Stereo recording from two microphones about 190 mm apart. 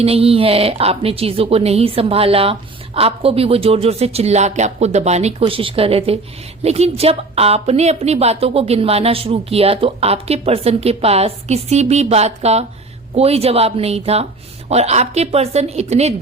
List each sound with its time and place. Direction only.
0.0 s a woman's voice: 30° right (ahead or behind)